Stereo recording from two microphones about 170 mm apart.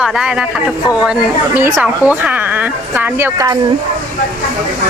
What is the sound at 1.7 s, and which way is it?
Speech, 5° right (ahead or behind).